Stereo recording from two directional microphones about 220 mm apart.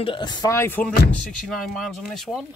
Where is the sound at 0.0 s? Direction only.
20° left (ahead or behind); by 2.4 s centre (ahead or behind).